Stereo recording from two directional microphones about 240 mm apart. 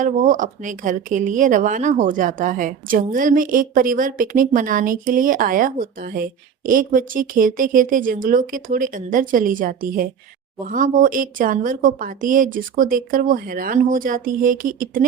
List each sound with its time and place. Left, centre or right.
0.0 s a woman's voice: right